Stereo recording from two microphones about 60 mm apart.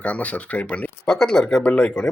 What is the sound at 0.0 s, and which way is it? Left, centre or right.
Speech, left.